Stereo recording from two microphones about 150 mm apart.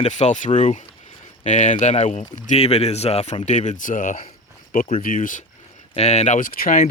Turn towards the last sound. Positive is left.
turn(degrees=70)  # may be behind; listen again after turning